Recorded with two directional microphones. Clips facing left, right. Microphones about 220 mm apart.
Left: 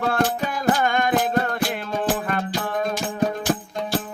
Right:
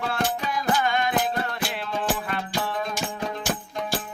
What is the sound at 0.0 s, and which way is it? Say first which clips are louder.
Music: left 5 dB; 50° left (ahead or behind).